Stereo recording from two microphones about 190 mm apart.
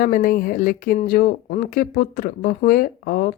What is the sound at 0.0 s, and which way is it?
Speech, 45° left (ahead or behind).